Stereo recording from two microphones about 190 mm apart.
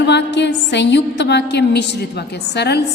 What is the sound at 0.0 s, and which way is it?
A woman's voice, 65° left (ahead or behind).